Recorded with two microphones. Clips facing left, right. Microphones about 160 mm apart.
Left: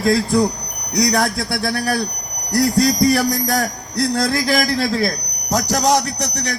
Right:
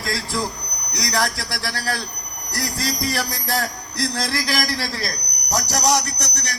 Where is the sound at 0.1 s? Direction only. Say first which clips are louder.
Left 10 dB; 60° left (ahead or behind).